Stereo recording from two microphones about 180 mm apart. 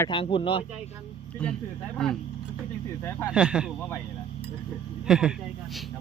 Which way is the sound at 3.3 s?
5° right (ahead or behind).